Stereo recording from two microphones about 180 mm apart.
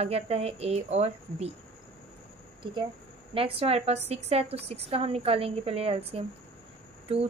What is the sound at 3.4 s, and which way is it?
A woman's voice, 30° right (ahead or behind).